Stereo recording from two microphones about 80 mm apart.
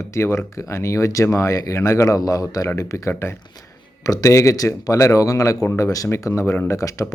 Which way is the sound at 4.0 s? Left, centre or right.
Left.